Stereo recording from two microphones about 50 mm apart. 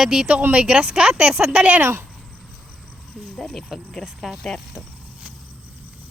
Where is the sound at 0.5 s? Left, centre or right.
Right.